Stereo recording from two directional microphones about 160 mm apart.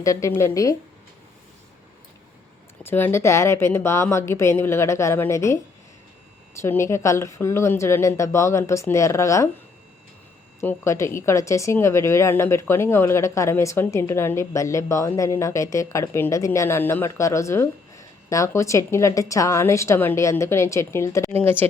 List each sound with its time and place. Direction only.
0.0 s a woman's voice: 20° left (ahead or behind)
2.8 s a woman's voice: 15° left (ahead or behind)
6.6 s a woman's voice: 15° left (ahead or behind)
10.6 s a woman's voice: 15° left (ahead or behind)